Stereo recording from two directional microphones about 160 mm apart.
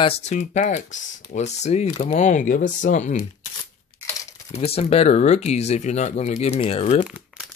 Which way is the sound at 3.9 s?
15° left (ahead or behind).